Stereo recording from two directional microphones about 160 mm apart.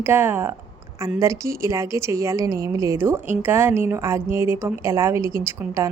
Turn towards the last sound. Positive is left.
turn(degrees=-15)  # may be behind; listen again after turning